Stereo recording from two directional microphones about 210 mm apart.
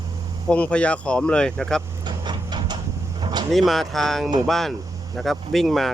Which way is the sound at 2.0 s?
20° right (ahead or behind).